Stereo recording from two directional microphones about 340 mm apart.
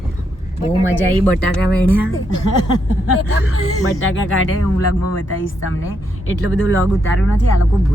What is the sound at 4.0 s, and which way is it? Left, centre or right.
Speech, left.